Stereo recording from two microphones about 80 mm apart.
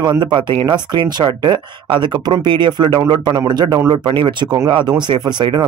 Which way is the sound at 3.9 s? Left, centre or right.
Right.